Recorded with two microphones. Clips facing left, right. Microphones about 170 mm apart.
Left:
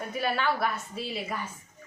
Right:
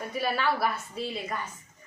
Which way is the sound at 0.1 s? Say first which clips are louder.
Even; centre (ahead or behind).